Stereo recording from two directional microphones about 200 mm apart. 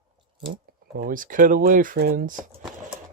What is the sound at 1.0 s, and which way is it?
Speech, 45° right (ahead or behind).